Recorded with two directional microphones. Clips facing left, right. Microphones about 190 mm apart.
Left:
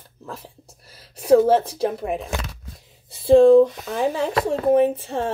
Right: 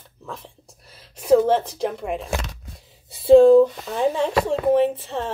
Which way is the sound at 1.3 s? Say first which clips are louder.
Left 3 dB; 10° left (ahead or behind).